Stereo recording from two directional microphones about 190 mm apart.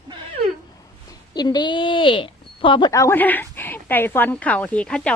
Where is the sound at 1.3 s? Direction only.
20° left (ahead or behind).